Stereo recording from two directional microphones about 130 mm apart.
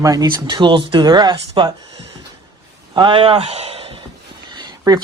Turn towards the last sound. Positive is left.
turn(degrees=-30)  # may be behind; listen again after turning